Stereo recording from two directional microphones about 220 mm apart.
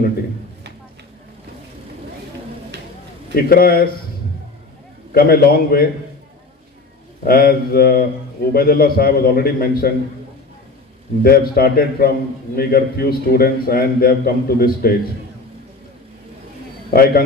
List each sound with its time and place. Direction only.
3.3 s a man's voice: 45° left (ahead or behind)
5.1 s a man's voice: 45° left (ahead or behind)
7.2 s a man's voice: 45° left (ahead or behind)
11.2 s a man's voice: 45° left (ahead or behind)
16.9 s a man's voice: 45° left (ahead or behind)